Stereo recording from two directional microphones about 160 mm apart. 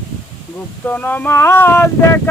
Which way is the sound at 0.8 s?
10° left (ahead or behind).